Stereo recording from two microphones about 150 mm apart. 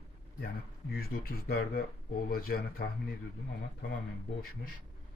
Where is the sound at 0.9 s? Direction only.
90° left.